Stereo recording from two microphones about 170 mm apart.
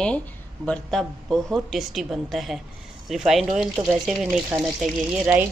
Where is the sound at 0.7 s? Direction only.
Centre (ahead or behind).